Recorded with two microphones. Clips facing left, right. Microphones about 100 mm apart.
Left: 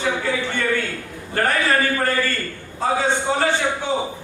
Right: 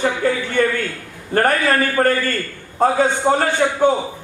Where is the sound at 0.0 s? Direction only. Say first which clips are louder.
Right 3 dB; 45° right (ahead or behind).